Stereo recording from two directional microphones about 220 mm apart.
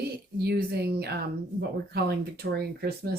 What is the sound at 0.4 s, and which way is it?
Speech, 45° right (ahead or behind).